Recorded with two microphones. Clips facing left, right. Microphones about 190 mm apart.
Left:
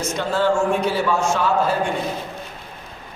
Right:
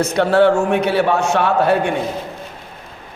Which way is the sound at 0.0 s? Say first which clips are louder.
Right 8 dB; 65° right (ahead or behind).